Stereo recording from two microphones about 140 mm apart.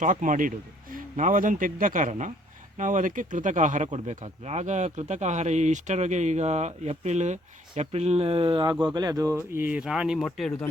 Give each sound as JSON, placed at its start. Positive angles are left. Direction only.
{"t": 0.0, "sound": "a man's voice", "side_deg": -65}